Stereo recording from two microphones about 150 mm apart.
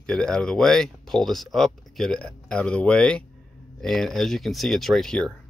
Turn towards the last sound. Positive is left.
turn(degrees=5)  # may be behind; listen again after turning